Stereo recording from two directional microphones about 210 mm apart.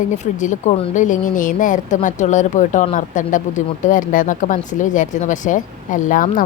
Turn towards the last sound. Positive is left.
turn(degrees=40)  # may be behind; listen again after turning